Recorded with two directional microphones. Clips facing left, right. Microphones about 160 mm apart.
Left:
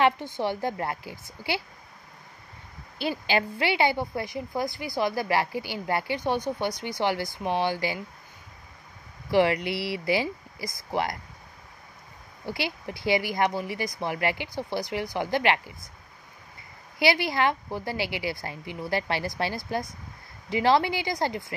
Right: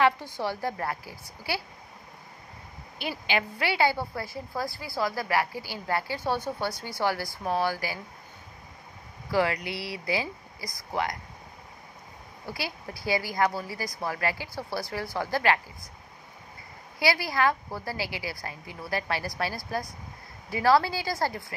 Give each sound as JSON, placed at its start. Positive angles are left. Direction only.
{"t": 0.0, "sound": "a woman's voice", "side_deg": 20}
{"t": 3.0, "sound": "a woman's voice", "side_deg": 30}
{"t": 9.3, "sound": "a woman's voice", "side_deg": 25}
{"t": 12.4, "sound": "a woman's voice", "side_deg": 25}
{"t": 17.0, "sound": "a woman's voice", "side_deg": 25}